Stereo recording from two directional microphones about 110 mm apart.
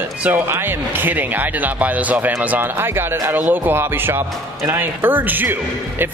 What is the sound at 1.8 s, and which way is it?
Speech, 15° right (ahead or behind).